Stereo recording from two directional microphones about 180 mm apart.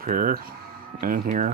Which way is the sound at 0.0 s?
55° right (ahead or behind).